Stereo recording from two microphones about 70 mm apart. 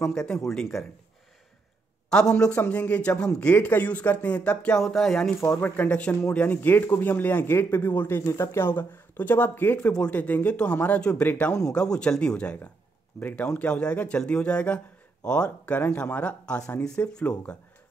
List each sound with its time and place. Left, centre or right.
0.0 s speech: centre
2.0 s a man's voice: centre
2.5 s speech: left
4.8 s speech: centre
5.9 s speech: centre
8.3 s speech: left; by 17.6 s centre